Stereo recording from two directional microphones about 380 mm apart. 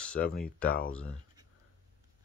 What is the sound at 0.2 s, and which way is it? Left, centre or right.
Speech, left.